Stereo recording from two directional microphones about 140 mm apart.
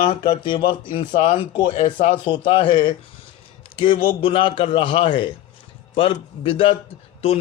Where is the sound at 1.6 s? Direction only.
45° left (ahead or behind).